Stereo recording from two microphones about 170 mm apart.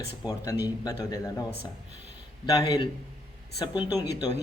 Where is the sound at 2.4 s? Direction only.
20° left (ahead or behind).